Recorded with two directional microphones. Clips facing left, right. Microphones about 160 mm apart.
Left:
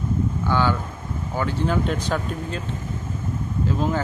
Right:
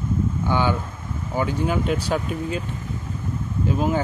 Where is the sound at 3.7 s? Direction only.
15° right (ahead or behind).